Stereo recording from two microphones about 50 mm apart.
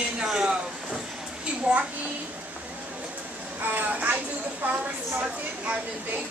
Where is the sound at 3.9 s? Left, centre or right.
Right.